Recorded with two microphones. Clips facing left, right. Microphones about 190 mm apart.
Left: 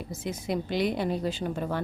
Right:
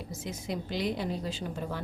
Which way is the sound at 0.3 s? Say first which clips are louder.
Left 6 dB; 60° left (ahead or behind).